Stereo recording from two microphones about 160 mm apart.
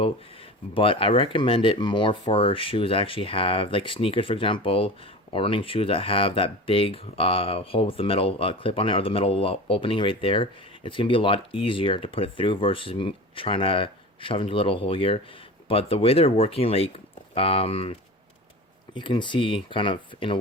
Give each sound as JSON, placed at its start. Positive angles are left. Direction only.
{"t": 0.7, "sound": "speech", "side_deg": 35}
{"t": 18.9, "sound": "speech", "side_deg": 30}